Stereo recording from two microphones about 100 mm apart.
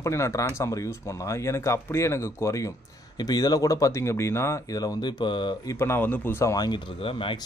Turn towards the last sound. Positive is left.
turn(degrees=65)  # may be behind; listen again after turning